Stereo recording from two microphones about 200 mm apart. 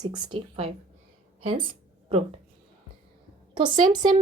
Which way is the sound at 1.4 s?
25° right (ahead or behind).